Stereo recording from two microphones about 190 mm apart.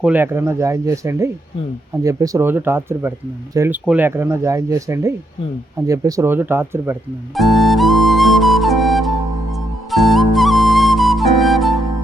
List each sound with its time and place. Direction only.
0.0 s speech: 10° right (ahead or behind)
7.3 s flute: centre (ahead or behind)